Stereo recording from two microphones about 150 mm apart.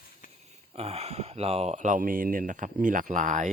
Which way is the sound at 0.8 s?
45° right (ahead or behind).